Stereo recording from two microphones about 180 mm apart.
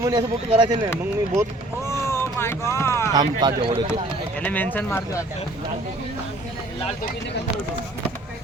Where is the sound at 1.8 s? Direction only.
15° left (ahead or behind).